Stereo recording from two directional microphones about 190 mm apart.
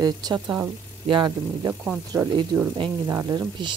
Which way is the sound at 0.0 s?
20° right (ahead or behind).